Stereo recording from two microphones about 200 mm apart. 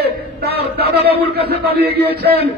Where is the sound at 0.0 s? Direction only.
55° right (ahead or behind).